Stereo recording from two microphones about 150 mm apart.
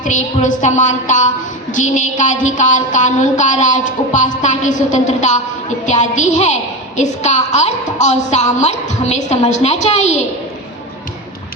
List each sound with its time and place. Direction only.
0.0 s a woman's voice: 55° left (ahead or behind)